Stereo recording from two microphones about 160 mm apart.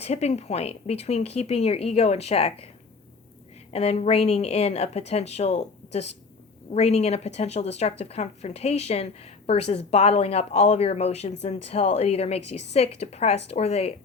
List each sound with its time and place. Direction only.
0.0 s a woman's voice: 40° left (ahead or behind)
3.7 s a woman's voice: 40° left (ahead or behind)